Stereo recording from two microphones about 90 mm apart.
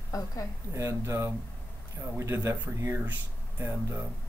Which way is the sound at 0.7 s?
30° right (ahead or behind).